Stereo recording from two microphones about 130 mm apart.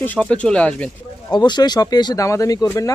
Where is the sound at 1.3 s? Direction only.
35° left (ahead or behind).